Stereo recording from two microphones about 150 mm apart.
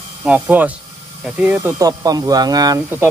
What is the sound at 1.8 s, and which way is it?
Speech, 25° right (ahead or behind).